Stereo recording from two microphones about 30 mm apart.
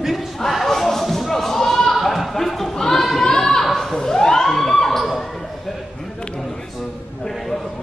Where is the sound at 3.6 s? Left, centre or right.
Centre.